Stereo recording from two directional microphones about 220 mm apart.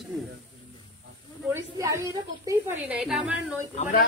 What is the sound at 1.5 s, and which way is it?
A woman's voice, 15° right (ahead or behind).